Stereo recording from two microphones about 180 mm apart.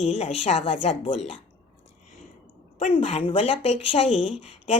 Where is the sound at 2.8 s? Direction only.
35° left (ahead or behind).